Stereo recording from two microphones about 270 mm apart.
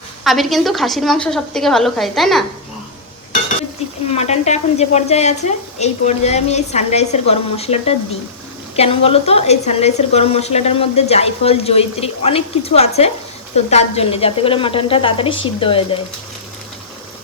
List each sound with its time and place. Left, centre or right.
0.3 s a woman's voice: centre
4.1 s speech: left